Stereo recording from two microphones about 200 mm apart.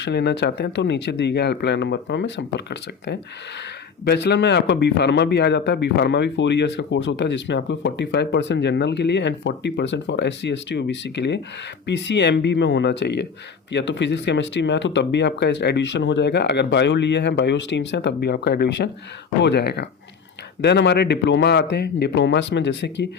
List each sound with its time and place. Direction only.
0.0 s a man's voice: 55° left (ahead or behind)